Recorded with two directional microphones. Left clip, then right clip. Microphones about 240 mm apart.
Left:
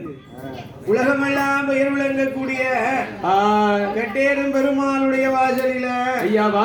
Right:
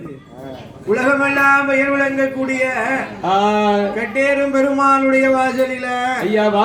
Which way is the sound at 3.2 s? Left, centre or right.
Right.